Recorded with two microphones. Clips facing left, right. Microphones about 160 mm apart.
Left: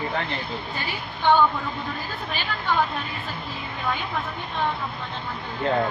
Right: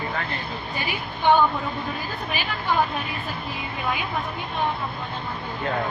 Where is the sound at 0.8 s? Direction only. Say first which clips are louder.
Right 2 dB; 15° right (ahead or behind).